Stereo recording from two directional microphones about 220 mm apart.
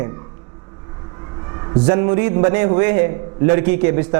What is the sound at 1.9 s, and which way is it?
A man's voice, 20° right (ahead or behind).